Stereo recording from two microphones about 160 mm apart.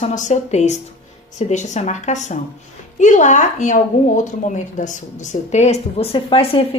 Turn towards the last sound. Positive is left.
turn(degrees=35)  # may be behind; listen again after turning